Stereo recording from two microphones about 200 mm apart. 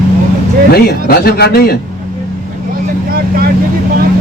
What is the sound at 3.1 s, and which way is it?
Speech, 50° right (ahead or behind).